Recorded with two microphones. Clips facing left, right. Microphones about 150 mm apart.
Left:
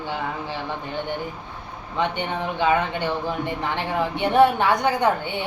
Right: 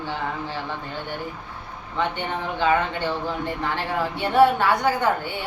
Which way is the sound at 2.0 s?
15° left (ahead or behind).